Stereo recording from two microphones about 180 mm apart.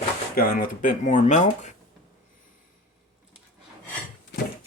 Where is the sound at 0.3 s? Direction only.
50° left (ahead or behind).